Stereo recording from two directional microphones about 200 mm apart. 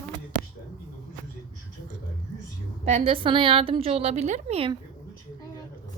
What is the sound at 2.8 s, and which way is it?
A woman's voice, 30° right (ahead or behind).